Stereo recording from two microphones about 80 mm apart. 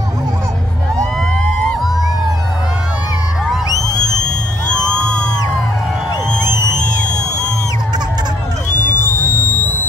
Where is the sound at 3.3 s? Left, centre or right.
Centre.